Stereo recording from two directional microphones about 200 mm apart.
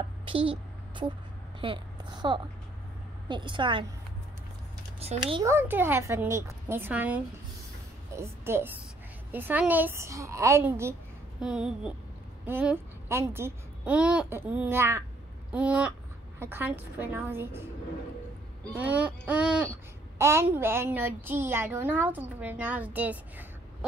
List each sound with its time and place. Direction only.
0.2 s a sound: 25° right (ahead or behind)
1.6 s a woman's voice: 25° right (ahead or behind)
5.3 s a child's voice: 15° right (ahead or behind)
8.2 s a child's voice: 10° right (ahead or behind)
11.4 s a sound: 5° right (ahead or behind)
12.4 s a child's voice: 10° right (ahead or behind)
18.8 s a child's voice: 10° right (ahead or behind)